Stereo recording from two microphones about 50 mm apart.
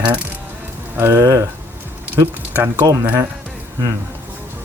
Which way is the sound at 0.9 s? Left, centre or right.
Right.